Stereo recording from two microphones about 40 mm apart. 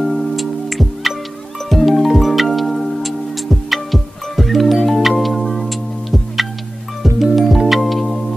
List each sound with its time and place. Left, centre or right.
0.0 s music: centre